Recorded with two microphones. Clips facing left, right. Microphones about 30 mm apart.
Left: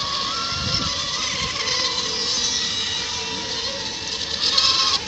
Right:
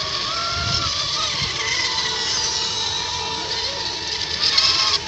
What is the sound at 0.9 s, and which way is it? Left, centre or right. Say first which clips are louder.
Vehicle: right 2 dB; right.